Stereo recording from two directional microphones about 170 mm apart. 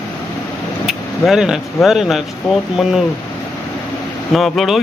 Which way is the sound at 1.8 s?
Centre (ahead or behind).